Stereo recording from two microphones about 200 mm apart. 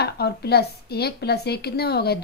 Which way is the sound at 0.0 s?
55° left (ahead or behind).